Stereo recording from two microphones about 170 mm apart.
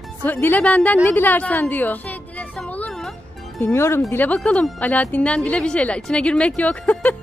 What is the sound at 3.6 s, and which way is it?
Speech, 15° left (ahead or behind).